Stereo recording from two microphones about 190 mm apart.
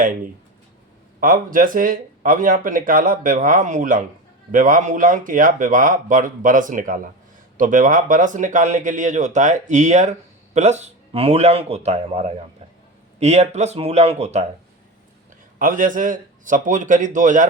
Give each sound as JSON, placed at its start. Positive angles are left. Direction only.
{"t": 1.2, "sound": "speech", "side_deg": -45}
{"t": 15.5, "sound": "speech", "side_deg": -45}